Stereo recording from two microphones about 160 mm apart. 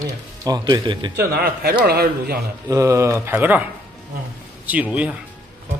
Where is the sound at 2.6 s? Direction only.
20° right (ahead or behind).